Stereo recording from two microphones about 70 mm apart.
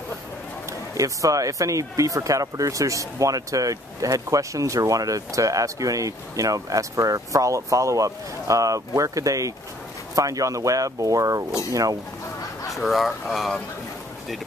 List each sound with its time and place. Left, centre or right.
0.7 s speech: right
12.7 s speech: centre